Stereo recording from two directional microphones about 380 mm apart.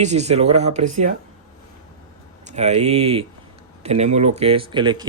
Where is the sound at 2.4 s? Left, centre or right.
Centre.